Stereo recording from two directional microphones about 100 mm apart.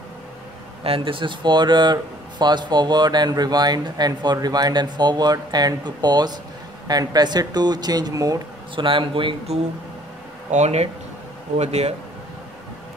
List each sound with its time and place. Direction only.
0.8 s speech: 65° right (ahead or behind); by 8.4 s 35° right (ahead or behind)
8.7 s speech: 55° right (ahead or behind)
11.5 s speech: 90° right